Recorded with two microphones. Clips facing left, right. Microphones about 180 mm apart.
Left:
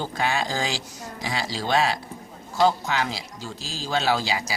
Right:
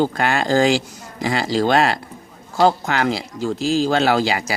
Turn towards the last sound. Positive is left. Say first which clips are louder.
# right 6 dB
turn(degrees=-55)  # may be behind; listen again after turning